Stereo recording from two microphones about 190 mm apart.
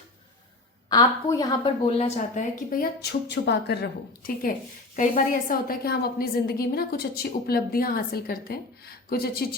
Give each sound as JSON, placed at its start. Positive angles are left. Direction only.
{"t": 0.9, "sound": "a woman's voice", "side_deg": 20}
{"t": 2.0, "sound": "speech", "side_deg": 40}
{"t": 3.0, "sound": "a woman's voice", "side_deg": 60}